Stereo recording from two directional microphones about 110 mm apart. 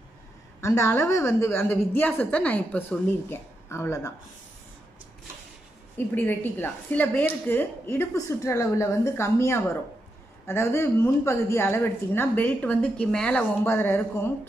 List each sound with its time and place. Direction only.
0.6 s a woman's voice: 25° left (ahead or behind)
5.9 s a woman's voice: 20° left (ahead or behind)
13.7 s a woman's voice: 20° left (ahead or behind)